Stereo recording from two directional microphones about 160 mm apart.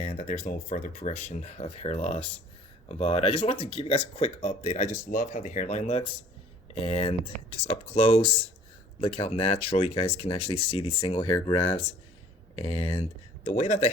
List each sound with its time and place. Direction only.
0.0 s speech: 45° left (ahead or behind)
4.9 s speech: 55° left (ahead or behind)